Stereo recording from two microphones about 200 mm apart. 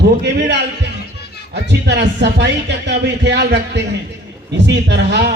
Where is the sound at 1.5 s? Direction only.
60° right (ahead or behind).